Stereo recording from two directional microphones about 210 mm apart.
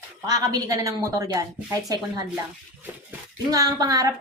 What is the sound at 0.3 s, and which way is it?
Speech, 15° right (ahead or behind).